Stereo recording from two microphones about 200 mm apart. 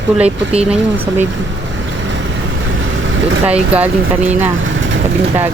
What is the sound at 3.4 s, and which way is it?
Speech, 5° right (ahead or behind).